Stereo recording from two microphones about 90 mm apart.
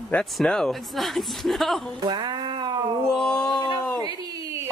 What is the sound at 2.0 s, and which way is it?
Speech, 50° right (ahead or behind).